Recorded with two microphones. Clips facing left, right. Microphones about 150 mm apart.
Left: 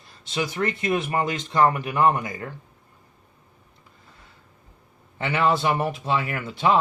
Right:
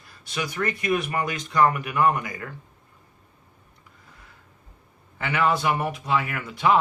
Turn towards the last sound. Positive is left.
turn(degrees=30)  # may be behind; listen again after turning